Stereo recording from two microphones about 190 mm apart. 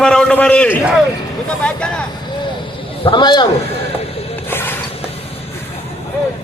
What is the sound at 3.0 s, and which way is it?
Speech, 25° left (ahead or behind).